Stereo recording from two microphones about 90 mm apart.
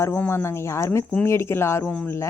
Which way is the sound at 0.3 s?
30° left (ahead or behind).